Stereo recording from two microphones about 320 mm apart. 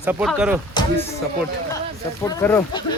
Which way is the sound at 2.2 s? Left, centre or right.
Centre.